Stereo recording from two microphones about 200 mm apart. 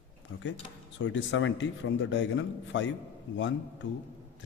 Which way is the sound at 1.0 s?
65° left (ahead or behind).